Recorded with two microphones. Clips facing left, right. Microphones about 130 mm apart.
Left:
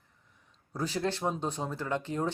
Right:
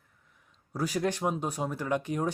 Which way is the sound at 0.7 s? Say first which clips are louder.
Right 2 dB; 10° right (ahead or behind).